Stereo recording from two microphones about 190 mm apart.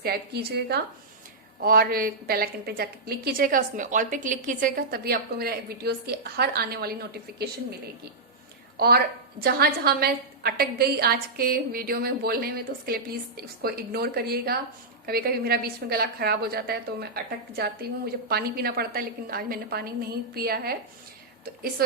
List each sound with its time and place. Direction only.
0.0 s a woman's voice: 55° right (ahead or behind)
9.4 s a woman's voice: 55° right (ahead or behind)
21.8 s speech: 55° right (ahead or behind)